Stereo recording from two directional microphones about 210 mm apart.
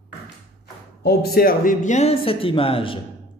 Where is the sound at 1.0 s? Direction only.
50° left (ahead or behind); by 2.9 s 25° left (ahead or behind).